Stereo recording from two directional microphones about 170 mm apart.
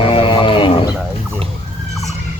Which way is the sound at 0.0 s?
30° left (ahead or behind).